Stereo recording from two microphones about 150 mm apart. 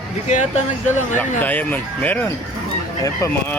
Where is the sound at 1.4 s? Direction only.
10° left (ahead or behind).